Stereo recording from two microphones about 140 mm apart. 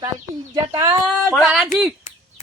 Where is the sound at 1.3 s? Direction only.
Centre (ahead or behind).